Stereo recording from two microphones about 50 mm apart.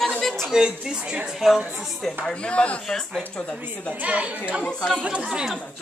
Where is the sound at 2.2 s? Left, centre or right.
Left.